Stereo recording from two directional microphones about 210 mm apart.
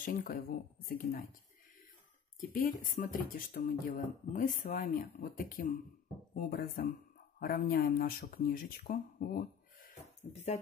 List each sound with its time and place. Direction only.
0.0 s speech: 40° left (ahead or behind)
2.4 s speech: 40° left (ahead or behind)